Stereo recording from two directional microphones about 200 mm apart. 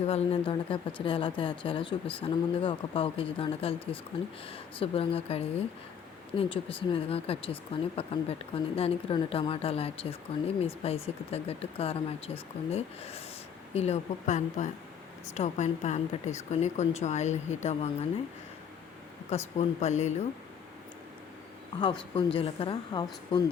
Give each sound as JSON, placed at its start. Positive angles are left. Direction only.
{"t": 0.0, "sound": "speech", "side_deg": 30}
{"t": 19.5, "sound": "speech", "side_deg": 35}
{"t": 22.1, "sound": "speech", "side_deg": 30}